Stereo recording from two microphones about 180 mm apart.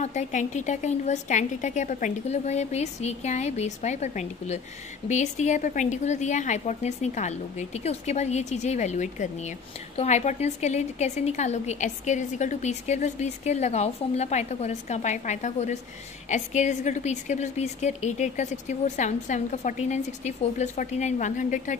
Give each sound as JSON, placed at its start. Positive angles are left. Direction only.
{"t": 0.0, "sound": "a woman's voice", "side_deg": 40}